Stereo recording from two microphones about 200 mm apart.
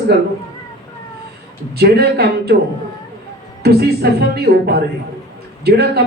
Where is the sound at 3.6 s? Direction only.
55° right (ahead or behind).